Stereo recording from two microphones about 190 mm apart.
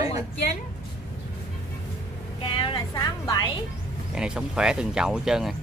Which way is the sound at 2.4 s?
25° left (ahead or behind).